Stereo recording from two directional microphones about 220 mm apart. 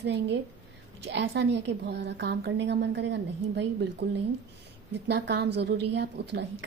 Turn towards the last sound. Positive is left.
turn(degrees=-50)  # may be behind; listen again after turning